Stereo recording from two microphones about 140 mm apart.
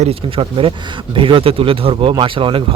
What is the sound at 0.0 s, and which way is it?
Speech, 40° right (ahead or behind).